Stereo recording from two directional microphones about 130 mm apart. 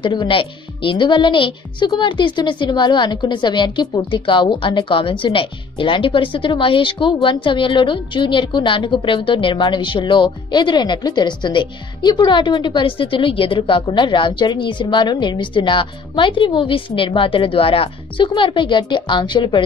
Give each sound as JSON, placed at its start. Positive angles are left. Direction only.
{"t": 0.0, "sound": "a woman's voice", "side_deg": 35}